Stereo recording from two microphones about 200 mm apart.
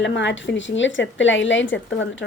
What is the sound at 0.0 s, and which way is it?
Speech, 65° left (ahead or behind).